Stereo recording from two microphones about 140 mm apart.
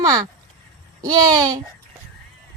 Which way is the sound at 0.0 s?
25° right (ahead or behind).